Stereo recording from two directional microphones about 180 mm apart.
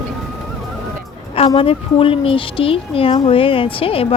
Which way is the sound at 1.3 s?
30° left (ahead or behind).